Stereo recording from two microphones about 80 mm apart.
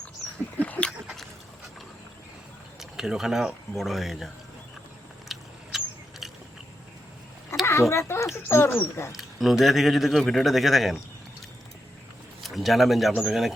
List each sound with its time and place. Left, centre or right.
0.6 s a sound: centre
2.9 s speech: centre
5.3 s biting: centre
7.6 s speech: left
9.1 s speech: centre
12.4 s speech: centre